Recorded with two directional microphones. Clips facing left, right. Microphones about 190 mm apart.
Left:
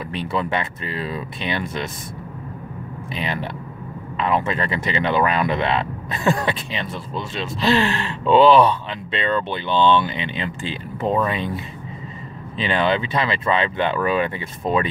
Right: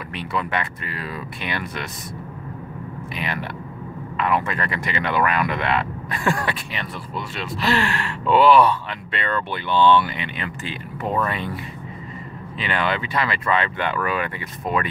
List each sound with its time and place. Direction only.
0.1 s speech: 30° left (ahead or behind)
3.2 s speech: 25° left (ahead or behind)